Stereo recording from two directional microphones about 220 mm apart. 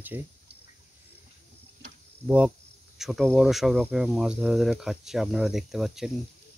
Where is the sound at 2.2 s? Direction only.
5° right (ahead or behind).